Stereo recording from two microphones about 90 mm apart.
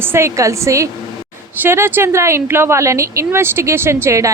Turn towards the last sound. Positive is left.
turn(degrees=-30)  # may be behind; listen again after turning